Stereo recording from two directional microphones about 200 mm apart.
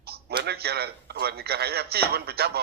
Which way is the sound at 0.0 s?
50° right (ahead or behind).